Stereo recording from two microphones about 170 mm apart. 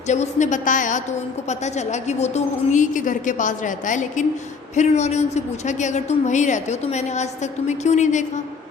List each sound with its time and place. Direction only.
0.1 s a woman's voice: 45° left (ahead or behind)